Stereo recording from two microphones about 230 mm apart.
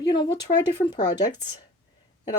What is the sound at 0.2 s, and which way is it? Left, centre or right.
Speech, left.